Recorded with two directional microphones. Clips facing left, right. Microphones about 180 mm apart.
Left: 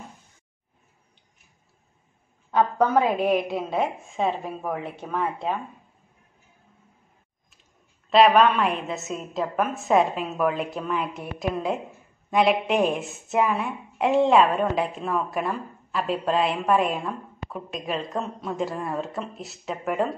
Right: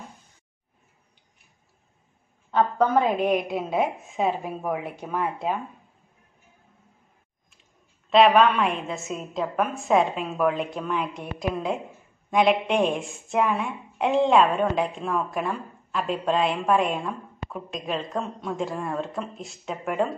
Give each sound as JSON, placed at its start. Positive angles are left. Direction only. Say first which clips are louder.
{"t": 2.5, "sound": "a woman's voice", "louder": "even", "side_deg": 5}
{"t": 8.1, "sound": "a woman's voice", "louder": "even", "side_deg": 0}